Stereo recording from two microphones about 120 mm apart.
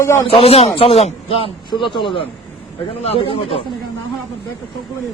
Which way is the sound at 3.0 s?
55° left (ahead or behind).